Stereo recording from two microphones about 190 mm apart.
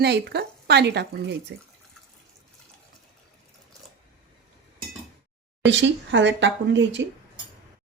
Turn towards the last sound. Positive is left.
turn(degrees=-70)  # may be behind; listen again after turning